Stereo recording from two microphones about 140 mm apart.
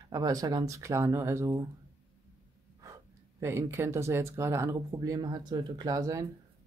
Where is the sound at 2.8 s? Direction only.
20° right (ahead or behind).